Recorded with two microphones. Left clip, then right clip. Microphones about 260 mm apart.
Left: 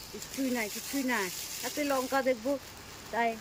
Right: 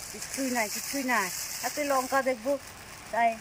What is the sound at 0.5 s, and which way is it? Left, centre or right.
Speech, centre.